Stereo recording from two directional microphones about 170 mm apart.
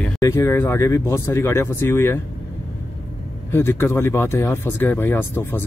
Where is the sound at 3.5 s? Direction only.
15° left (ahead or behind).